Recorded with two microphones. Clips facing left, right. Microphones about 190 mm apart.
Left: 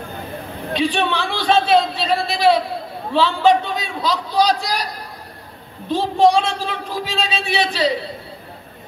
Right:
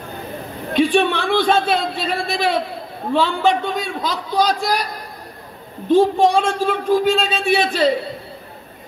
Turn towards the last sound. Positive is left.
turn(degrees=-50)  # may be behind; listen again after turning